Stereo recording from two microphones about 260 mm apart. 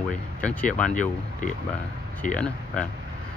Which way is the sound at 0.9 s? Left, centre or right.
Left.